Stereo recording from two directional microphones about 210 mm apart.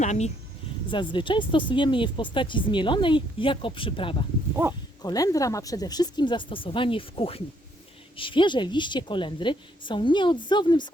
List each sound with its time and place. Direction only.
0.0 s speech: 35° left (ahead or behind)
0.9 s speech: 25° left (ahead or behind)